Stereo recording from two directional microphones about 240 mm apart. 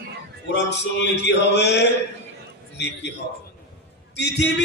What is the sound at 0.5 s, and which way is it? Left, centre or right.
Speech, left.